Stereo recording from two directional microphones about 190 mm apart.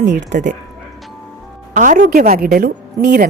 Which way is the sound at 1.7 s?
45° right (ahead or behind).